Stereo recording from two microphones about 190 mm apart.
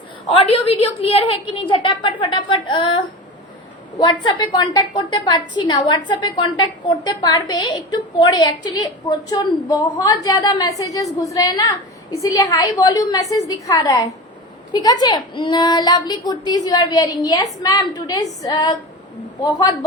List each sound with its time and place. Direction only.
0.3 s a woman's voice: 30° left (ahead or behind)